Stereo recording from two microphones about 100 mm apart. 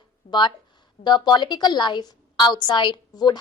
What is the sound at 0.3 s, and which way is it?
A woman's voice, 50° left (ahead or behind).